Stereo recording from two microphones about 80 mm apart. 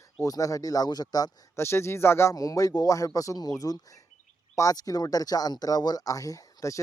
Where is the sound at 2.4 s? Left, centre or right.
Left.